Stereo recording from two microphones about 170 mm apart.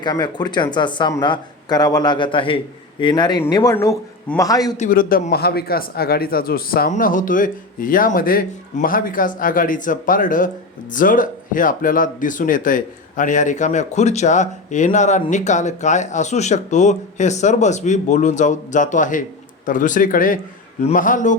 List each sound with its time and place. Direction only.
0.0 s speech: 25° left (ahead or behind)
4.8 s a man's voice: 55° left (ahead or behind)
6.9 s speech: 50° left (ahead or behind)